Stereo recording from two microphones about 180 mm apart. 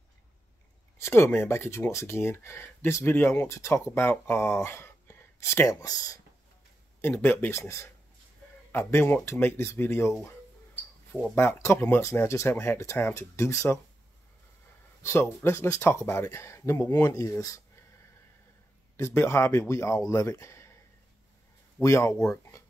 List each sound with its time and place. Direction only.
0.9 s speech: 15° left (ahead or behind)
11.1 s speech: 10° left (ahead or behind)
15.0 s speech: 15° left (ahead or behind)
18.9 s speech: 15° left (ahead or behind)
21.8 s speech: 15° left (ahead or behind)